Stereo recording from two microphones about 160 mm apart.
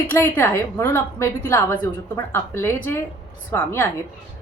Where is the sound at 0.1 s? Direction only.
15° left (ahead or behind).